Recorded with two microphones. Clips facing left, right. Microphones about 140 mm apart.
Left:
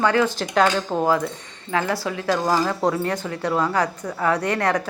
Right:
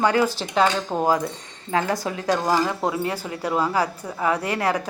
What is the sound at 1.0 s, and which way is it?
A woman's voice, 15° right (ahead or behind).